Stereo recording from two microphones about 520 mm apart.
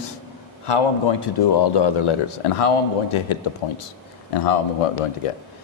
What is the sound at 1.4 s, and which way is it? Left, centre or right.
Speech, left.